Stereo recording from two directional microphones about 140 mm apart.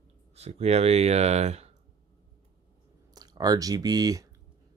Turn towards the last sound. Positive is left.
turn(degrees=-25)  # may be behind; listen again after turning